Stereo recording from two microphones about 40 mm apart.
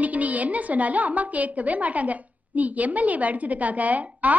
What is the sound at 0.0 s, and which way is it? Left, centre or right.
A woman's voice, right.